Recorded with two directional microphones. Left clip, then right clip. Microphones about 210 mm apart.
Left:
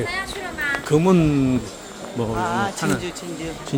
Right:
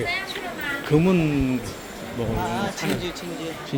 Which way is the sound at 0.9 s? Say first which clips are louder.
Left 3 dB; 25° left (ahead or behind).